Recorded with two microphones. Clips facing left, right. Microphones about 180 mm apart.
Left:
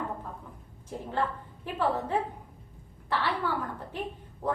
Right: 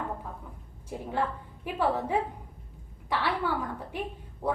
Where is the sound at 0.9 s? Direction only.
10° right (ahead or behind).